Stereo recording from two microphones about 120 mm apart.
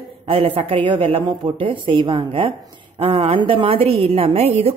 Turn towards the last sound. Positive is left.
turn(degrees=-60)  # may be behind; listen again after turning